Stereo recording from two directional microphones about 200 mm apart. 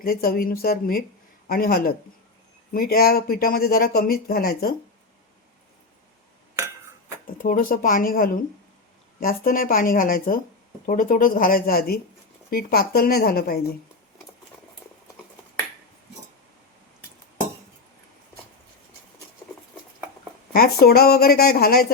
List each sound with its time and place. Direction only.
0.0 s speech: 45° left (ahead or behind)
7.3 s speech: 40° left (ahead or behind)
20.5 s speech: 50° left (ahead or behind)